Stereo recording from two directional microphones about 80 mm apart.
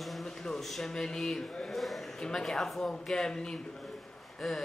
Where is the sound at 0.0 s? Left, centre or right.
Centre.